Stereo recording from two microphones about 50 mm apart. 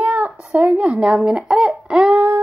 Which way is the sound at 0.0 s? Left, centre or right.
Right.